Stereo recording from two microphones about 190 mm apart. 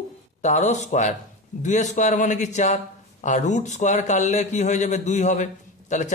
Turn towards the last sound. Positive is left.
turn(degrees=40)  # may be behind; listen again after turning